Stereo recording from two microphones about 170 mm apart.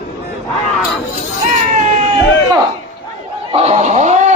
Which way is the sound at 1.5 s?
45° right (ahead or behind).